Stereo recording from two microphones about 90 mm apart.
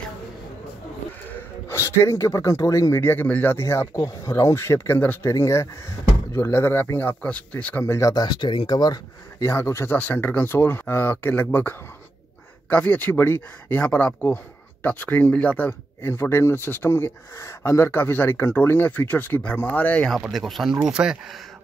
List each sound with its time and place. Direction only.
1.7 s speech: 30° left (ahead or behind)
3.0 s speech: 20° left (ahead or behind)
5.2 s speech: 35° left (ahead or behind); by 7.8 s 15° left (ahead or behind)
7.8 s speech: 30° left (ahead or behind)
8.1 s speech: 55° left (ahead or behind); by 20.1 s 15° left (ahead or behind)
20.1 s speech: centre (ahead or behind)